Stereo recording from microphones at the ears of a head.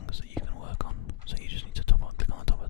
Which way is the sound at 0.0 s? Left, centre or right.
Left.